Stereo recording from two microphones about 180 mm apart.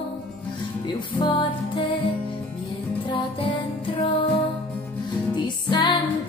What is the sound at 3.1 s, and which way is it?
Music, 30° left (ahead or behind).